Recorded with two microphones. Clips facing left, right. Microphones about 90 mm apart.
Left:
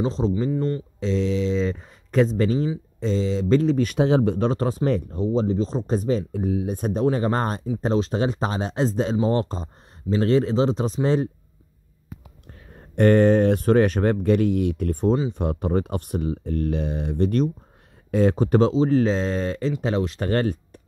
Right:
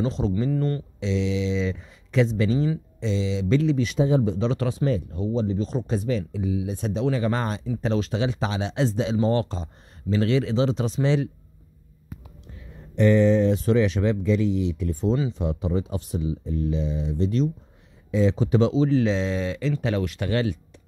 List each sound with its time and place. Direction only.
0.0 s speech: 30° left (ahead or behind)
0.5 s speech: 20° left (ahead or behind)
0.9 s speech: 40° left (ahead or behind)
4.0 s speech: 70° left (ahead or behind)
4.5 s speech: 40° left (ahead or behind)
5.1 s speech: 35° left (ahead or behind)
6.3 s speech: 50° left (ahead or behind)
12.5 s speech: 50° left (ahead or behind)
19.8 s speech: 30° left (ahead or behind)